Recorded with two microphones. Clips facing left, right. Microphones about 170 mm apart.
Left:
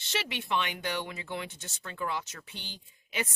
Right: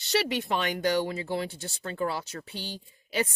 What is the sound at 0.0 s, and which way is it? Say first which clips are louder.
Speech: right 8 dB; 40° right (ahead or behind).